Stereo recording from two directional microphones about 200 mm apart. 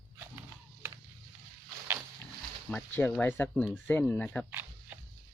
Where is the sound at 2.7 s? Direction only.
5° left (ahead or behind).